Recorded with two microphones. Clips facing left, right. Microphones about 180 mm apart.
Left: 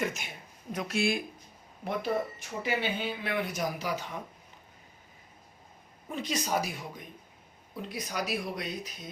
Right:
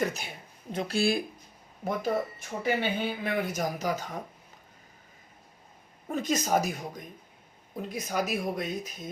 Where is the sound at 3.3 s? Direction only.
45° right (ahead or behind).